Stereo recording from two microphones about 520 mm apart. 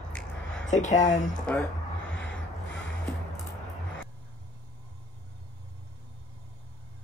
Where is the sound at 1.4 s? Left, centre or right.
Centre.